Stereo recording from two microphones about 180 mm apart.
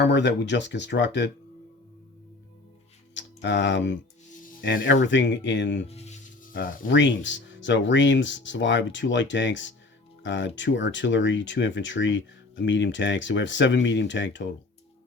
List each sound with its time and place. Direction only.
0.0 s speech: 80° left
3.2 s speech: 85° left
5.9 s music: 35° left (ahead or behind)
6.5 s speech: 70° left (ahead or behind)